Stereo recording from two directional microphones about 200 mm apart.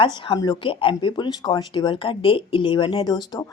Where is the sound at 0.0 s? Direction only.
20° left (ahead or behind).